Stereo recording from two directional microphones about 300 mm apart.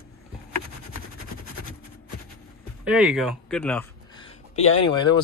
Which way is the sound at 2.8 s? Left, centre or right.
Centre.